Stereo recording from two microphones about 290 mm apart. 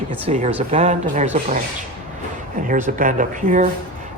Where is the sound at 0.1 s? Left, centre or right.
Right.